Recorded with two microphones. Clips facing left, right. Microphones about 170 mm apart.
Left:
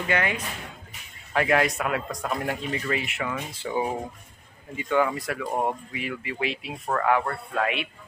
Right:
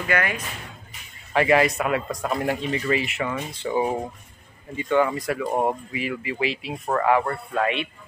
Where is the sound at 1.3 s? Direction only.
Centre (ahead or behind).